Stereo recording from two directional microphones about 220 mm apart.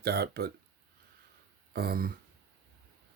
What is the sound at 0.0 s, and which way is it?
Speech, 45° right (ahead or behind).